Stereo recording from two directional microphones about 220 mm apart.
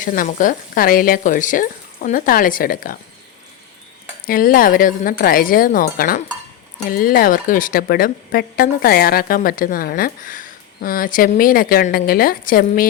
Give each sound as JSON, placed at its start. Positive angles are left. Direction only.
{"t": 0.0, "sound": "speech", "side_deg": 35}
{"t": 4.3, "sound": "speech", "side_deg": 40}